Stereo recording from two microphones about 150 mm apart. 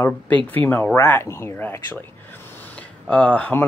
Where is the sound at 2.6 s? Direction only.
10° left (ahead or behind).